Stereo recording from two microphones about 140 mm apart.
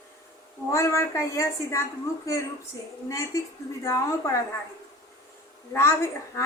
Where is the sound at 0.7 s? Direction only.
20° left (ahead or behind).